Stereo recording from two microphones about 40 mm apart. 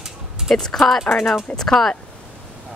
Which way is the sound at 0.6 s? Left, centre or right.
Centre.